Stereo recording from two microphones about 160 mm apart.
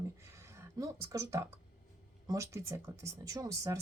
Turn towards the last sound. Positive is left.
turn(degrees=-25)  # may be behind; listen again after turning